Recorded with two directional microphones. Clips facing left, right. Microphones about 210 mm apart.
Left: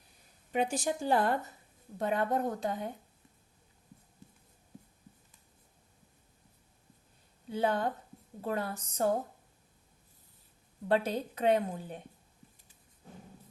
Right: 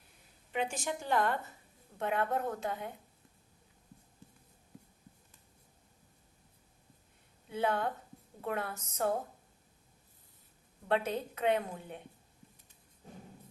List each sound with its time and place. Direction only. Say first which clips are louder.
0.5 s a woman's voice: left 4 dB; 40° left (ahead or behind)
7.5 s a woman's voice: left 2 dB; 35° left (ahead or behind)
10.8 s a woman's voice: left 3 dB; 35° left (ahead or behind)